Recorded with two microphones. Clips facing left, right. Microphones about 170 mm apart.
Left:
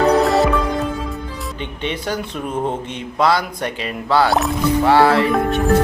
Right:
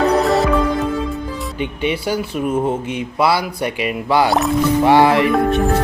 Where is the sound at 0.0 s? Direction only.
Centre (ahead or behind).